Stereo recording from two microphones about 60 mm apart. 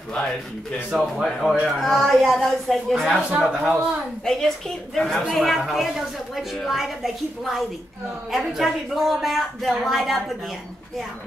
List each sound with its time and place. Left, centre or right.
0.1 s a woman's voice: centre
0.9 s a woman's voice: centre
3.3 s a man's voice: centre
4.2 s a woman's voice: centre